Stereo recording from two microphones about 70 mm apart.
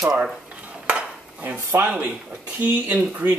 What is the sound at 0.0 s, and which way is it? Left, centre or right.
Dishes, centre.